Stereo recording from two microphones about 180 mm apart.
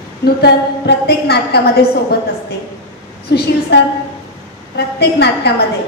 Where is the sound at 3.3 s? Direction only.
70° left (ahead or behind).